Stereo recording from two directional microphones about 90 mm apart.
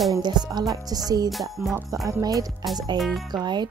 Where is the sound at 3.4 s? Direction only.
55° right (ahead or behind).